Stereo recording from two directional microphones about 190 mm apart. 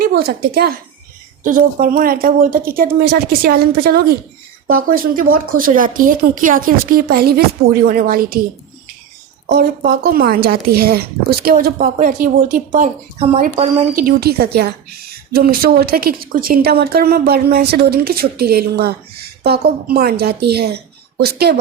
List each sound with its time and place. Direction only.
0.0 s a woman's voice: 55° right (ahead or behind)
1.5 s speech: 45° right (ahead or behind)
9.5 s speech: 55° right (ahead or behind); by 13.4 s 35° right (ahead or behind)
13.9 s a woman's voice: 55° right (ahead or behind)